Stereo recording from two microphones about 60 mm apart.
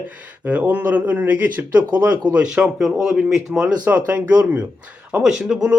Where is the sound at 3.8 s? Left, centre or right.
Right.